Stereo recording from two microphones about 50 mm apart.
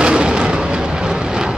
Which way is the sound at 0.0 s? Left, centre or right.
Centre.